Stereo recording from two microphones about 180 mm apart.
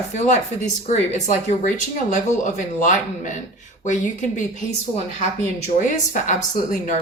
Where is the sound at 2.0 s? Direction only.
45° left (ahead or behind).